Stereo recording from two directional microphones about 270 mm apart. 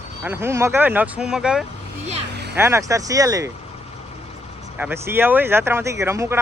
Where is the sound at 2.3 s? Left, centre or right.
Right.